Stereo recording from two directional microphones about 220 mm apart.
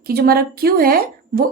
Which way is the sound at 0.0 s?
45° right (ahead or behind).